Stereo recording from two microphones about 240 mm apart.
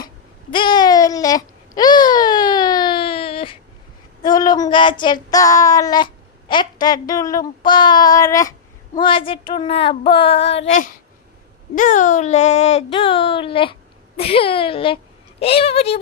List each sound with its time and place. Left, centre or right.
0.5 s babbling: centre
4.2 s child singing: centre
6.5 s speech: centre